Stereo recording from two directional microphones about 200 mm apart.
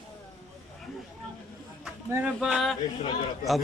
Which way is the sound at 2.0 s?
10° right (ahead or behind).